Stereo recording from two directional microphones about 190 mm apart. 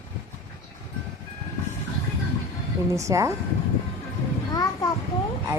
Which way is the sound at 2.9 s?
15° right (ahead or behind).